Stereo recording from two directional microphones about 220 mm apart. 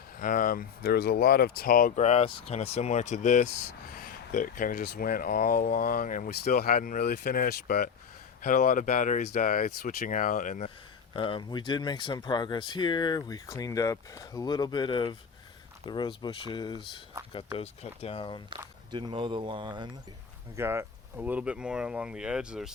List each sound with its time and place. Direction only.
0.2 s speech: 40° left (ahead or behind)
11.1 s speech: 25° left (ahead or behind)
18.5 s speech: 20° right (ahead or behind); by 22.7 s 5° right (ahead or behind)